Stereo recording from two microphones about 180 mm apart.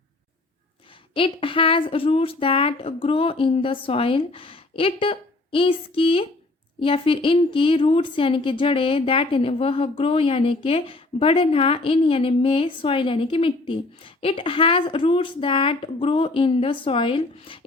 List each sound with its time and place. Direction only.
1.1 s speech: 30° left (ahead or behind)